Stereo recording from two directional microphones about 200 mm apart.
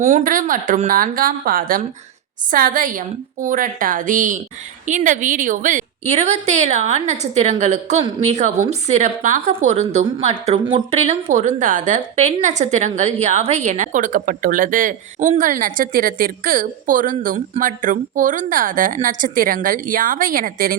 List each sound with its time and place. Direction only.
0.0 s a woman's voice: 35° right (ahead or behind)